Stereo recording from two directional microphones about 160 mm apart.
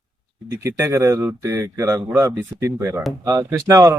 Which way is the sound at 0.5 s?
15° right (ahead or behind).